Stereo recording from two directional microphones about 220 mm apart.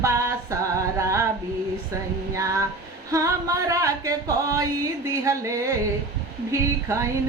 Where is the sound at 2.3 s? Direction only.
15° right (ahead or behind).